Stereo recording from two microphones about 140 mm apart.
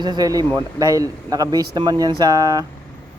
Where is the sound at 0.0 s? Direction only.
30° right (ahead or behind).